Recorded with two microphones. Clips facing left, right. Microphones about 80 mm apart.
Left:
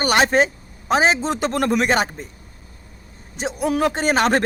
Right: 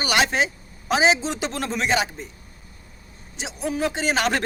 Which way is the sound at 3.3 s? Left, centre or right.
Left.